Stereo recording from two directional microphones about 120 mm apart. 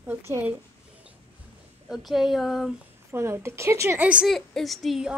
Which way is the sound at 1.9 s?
Centre (ahead or behind).